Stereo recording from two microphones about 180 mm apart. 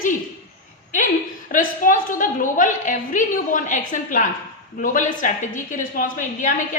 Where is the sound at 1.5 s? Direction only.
50° left (ahead or behind).